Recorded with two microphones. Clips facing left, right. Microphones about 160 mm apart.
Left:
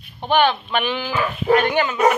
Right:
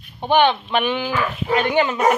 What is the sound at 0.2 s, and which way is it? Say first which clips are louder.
Speech: right 1 dB; 15° right (ahead or behind).